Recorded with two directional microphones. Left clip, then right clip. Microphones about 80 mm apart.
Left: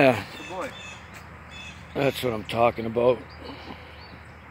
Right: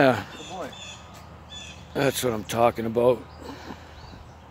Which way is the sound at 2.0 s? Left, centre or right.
Right.